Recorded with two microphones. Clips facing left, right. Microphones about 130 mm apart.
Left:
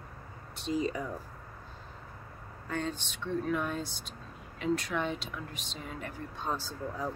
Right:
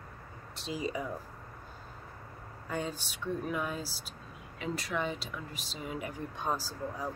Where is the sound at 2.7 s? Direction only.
10° right (ahead or behind).